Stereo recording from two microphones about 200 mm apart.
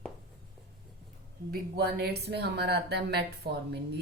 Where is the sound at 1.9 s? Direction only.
55° right (ahead or behind).